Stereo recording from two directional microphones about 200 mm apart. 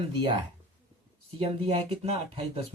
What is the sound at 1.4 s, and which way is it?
Speech, 30° right (ahead or behind).